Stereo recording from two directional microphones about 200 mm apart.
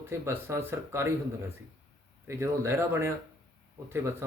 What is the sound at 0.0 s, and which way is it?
Speech, 10° right (ahead or behind).